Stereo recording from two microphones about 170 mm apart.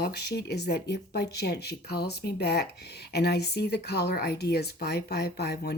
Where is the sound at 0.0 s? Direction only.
70° left (ahead or behind).